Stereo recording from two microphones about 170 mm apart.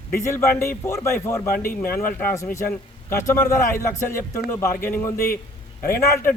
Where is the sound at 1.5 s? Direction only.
55° left (ahead or behind).